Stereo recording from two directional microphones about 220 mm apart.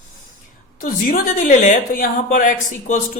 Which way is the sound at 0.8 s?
40° left (ahead or behind).